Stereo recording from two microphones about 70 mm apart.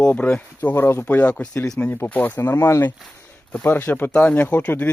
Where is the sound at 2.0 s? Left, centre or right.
Left.